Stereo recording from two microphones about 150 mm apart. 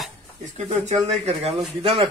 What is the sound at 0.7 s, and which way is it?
Speech, 50° right (ahead or behind).